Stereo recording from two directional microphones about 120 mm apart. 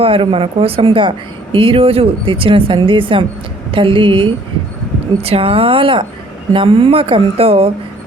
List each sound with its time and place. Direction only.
0.0 s speech: 50° right (ahead or behind)
5.2 s speech: 55° right (ahead or behind)